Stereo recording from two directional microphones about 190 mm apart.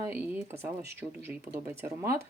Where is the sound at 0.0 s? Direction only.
10° right (ahead or behind).